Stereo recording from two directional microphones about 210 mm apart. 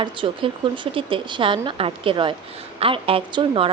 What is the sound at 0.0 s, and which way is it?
A woman's voice, 25° right (ahead or behind).